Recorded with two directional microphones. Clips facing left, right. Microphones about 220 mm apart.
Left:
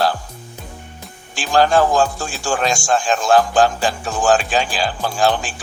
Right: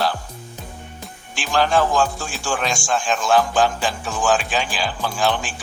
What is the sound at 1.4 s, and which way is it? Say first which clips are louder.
Speech: left 4 dB; 40° left (ahead or behind).